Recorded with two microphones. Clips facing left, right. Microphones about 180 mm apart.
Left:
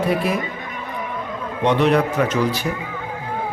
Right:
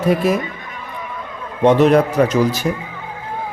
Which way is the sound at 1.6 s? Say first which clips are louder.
Right 5 dB; 45° right (ahead or behind).